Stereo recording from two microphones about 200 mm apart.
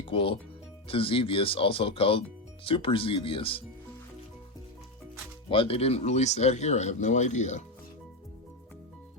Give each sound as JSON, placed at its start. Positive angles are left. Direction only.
{"t": 0.0, "sound": "speech", "side_deg": 25}
{"t": 5.5, "sound": "speech", "side_deg": 25}